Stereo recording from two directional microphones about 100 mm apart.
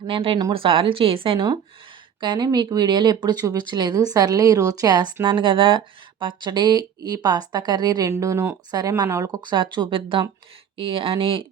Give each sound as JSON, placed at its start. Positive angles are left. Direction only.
{"t": 0.1, "sound": "speech", "side_deg": -65}
{"t": 2.2, "sound": "a woman's voice", "side_deg": -45}
{"t": 5.2, "sound": "speech", "side_deg": -50}
{"t": 8.1, "sound": "a woman's voice", "side_deg": -30}
{"t": 9.4, "sound": "speech", "side_deg": -50}